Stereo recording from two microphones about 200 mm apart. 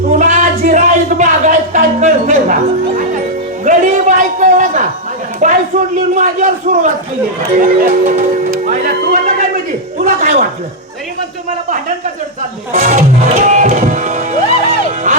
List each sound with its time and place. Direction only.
0.2 s a sound: 40° right (ahead or behind)
3.6 s music: 35° right (ahead or behind)
5.4 s a sound: 40° right (ahead or behind)
6.1 s speech: 40° right (ahead or behind)
12.7 s speech: 35° right (ahead or behind)
13.5 s music: 40° right (ahead or behind)